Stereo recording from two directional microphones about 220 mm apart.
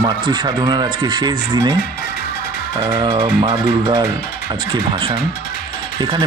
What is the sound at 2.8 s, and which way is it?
Speech, 15° right (ahead or behind).